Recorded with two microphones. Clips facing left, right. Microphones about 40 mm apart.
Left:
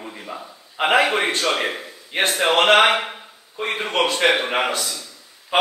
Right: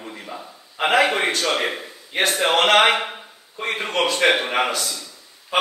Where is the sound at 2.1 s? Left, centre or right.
Left.